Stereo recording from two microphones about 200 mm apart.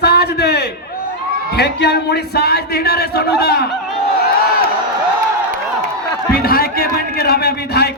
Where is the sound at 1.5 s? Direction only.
55° left (ahead or behind).